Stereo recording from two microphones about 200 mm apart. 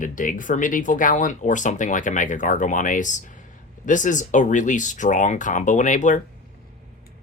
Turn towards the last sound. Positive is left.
turn(degrees=40)  # may be behind; listen again after turning